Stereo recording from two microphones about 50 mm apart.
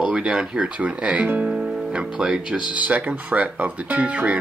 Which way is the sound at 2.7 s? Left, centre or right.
Right.